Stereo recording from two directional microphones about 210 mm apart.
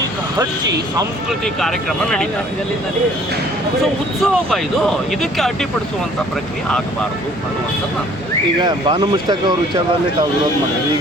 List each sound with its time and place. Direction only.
1.3 s speech: centre (ahead or behind)
4.2 s speech: centre (ahead or behind)
8.6 s speech: 20° right (ahead or behind)